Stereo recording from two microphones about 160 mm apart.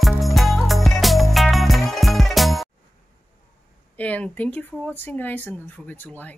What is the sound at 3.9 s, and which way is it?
Speech, 10° left (ahead or behind).